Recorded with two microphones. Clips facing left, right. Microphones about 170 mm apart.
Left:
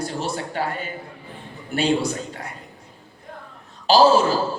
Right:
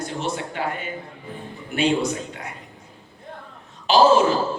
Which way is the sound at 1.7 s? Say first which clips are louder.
Even; 35° left (ahead or behind).